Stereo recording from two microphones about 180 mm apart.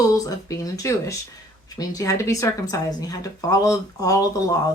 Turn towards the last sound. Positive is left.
turn(degrees=20)  # may be behind; listen again after turning